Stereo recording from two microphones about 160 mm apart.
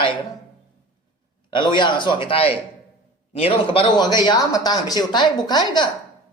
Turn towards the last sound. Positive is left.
turn(degrees=25)  # may be behind; listen again after turning